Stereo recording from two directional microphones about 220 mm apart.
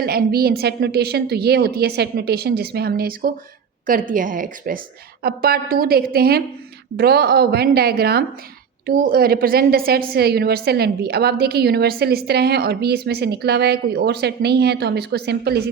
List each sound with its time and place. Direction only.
0.0 s a woman's voice: 45° right (ahead or behind)